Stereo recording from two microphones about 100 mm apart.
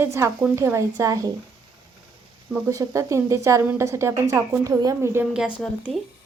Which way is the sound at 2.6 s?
30° right (ahead or behind).